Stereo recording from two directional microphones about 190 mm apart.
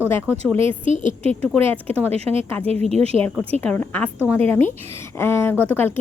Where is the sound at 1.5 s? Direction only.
10° left (ahead or behind).